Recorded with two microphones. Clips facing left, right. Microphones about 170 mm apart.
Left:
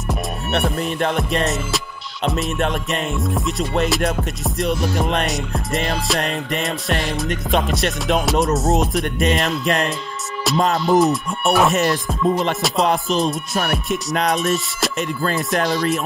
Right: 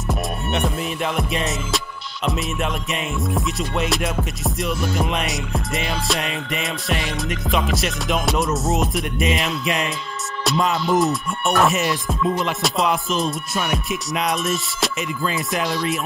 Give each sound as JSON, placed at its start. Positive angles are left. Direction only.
{"t": 0.1, "sound": "music", "side_deg": 0}
{"t": 15.6, "sound": "music", "side_deg": 45}